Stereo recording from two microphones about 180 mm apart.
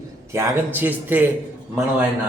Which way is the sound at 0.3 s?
10° right (ahead or behind).